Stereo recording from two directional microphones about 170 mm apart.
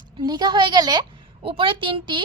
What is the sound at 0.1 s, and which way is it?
A woman's voice, 25° right (ahead or behind).